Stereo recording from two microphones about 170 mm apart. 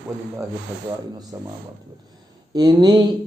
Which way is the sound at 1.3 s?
15° right (ahead or behind).